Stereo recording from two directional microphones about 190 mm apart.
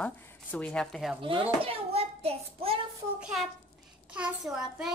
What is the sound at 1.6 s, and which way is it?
Child singing, 30° right (ahead or behind).